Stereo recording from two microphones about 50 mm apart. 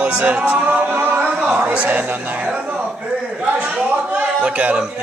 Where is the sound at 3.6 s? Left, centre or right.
Right.